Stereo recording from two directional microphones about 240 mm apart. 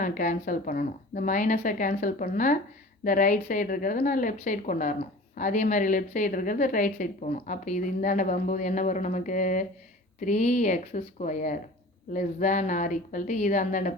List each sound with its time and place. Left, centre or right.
0.0 s a woman's voice: left